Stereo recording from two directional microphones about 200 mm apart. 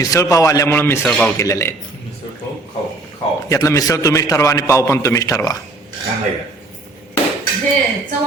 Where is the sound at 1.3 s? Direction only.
15° left (ahead or behind).